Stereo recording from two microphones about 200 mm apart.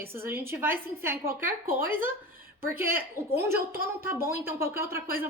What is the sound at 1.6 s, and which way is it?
Speech, 45° right (ahead or behind).